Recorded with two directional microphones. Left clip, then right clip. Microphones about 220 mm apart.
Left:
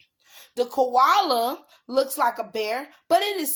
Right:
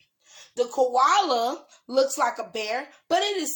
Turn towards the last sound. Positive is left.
turn(degrees=30)  # may be behind; listen again after turning